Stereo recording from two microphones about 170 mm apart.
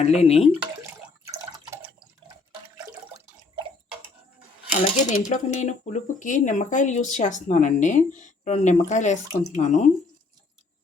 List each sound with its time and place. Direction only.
0.0 s speech: 40° left (ahead or behind)
4.7 s speech: 45° left (ahead or behind)